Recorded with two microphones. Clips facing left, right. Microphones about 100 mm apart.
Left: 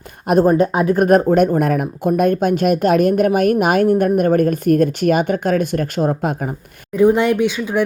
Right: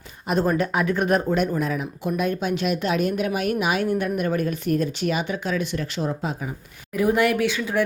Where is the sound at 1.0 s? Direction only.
50° left (ahead or behind).